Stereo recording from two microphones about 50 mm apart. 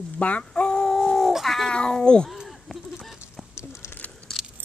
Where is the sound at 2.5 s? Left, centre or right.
Centre.